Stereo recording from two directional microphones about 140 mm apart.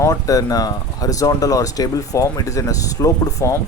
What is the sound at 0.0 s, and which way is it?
Speech, 25° left (ahead or behind).